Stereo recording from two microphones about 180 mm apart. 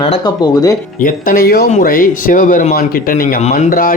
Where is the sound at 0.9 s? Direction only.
50° left (ahead or behind).